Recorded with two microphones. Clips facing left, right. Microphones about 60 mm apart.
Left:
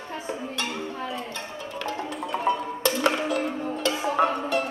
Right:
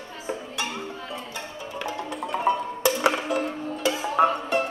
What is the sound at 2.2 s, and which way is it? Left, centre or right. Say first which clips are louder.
Music: right 2 dB; centre.